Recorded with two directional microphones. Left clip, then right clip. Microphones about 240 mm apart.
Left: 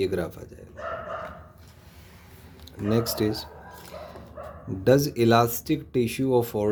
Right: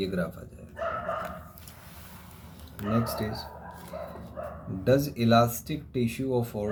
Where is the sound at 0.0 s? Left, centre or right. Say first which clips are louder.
Left 5 dB; left.